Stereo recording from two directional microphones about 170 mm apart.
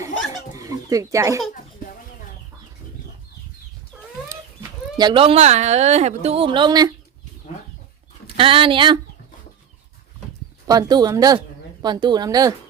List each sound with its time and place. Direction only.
0.5 s a sound: 20° right (ahead or behind)
4.9 s a woman's voice: 30° right (ahead or behind)
8.4 s a woman's voice: 30° right (ahead or behind)
10.7 s speech: 25° right (ahead or behind)